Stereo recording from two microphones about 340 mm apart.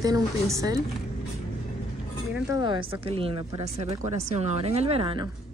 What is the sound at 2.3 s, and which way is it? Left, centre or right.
Speech, centre.